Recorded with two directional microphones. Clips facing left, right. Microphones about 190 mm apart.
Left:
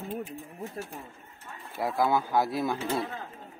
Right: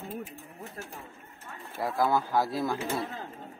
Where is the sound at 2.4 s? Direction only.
20° left (ahead or behind).